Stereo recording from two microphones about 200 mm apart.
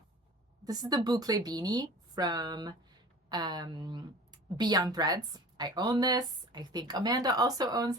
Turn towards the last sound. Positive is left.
turn(degrees=-20)  # may be behind; listen again after turning